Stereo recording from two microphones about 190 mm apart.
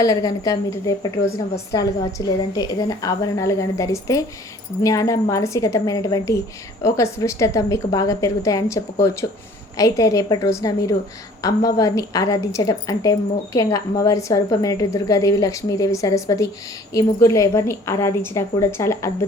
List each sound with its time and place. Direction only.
0.0 s a woman's voice: 20° left (ahead or behind)